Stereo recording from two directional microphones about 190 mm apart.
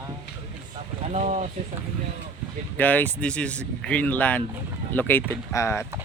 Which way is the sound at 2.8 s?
10° left (ahead or behind).